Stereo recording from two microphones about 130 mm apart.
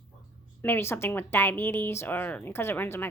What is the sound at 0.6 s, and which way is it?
Speech, 15° left (ahead or behind).